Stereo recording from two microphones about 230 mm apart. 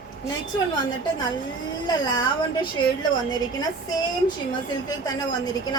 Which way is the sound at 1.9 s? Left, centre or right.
Centre.